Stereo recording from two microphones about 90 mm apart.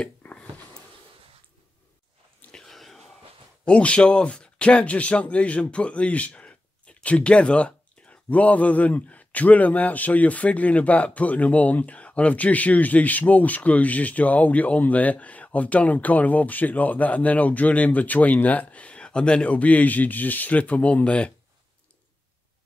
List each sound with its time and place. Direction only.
0.0 s a sound: 15° left (ahead or behind)
2.5 s whispering: 5° left (ahead or behind)
3.6 s speech: 15° left (ahead or behind)